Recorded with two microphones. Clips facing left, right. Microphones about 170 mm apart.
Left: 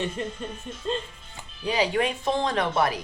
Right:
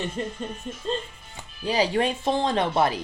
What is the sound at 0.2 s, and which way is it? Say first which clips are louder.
Speech: right 1 dB; 35° right (ahead or behind).